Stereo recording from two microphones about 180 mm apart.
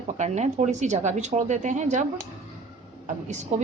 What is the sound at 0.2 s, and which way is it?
Speech, 40° right (ahead or behind).